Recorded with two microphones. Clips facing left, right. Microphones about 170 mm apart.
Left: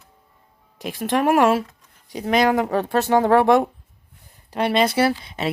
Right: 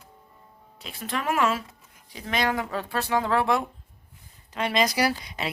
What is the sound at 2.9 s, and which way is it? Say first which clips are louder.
Speech: left 8 dB; 45° left (ahead or behind).